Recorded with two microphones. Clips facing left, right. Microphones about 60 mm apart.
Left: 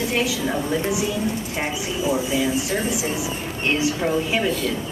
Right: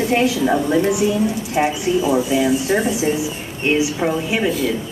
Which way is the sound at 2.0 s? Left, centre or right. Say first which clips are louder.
Right 3 dB; right.